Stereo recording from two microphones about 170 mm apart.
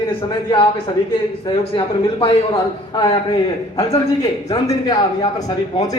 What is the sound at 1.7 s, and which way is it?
Speech, 30° left (ahead or behind).